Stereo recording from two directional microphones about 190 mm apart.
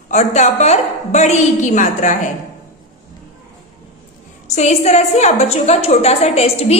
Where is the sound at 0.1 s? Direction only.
40° left (ahead or behind).